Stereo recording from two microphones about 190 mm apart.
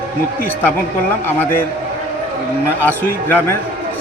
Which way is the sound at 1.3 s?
10° left (ahead or behind).